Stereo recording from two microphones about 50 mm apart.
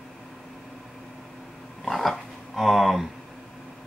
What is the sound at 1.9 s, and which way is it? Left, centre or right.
Dog, centre.